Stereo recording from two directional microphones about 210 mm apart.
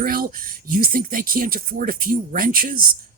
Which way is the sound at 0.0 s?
45° right (ahead or behind).